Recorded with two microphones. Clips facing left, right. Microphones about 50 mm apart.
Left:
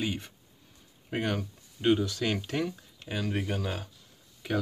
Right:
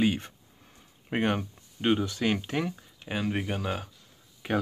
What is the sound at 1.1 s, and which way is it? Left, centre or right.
Speech, right.